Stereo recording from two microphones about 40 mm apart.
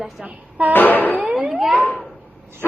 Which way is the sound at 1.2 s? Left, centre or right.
Right.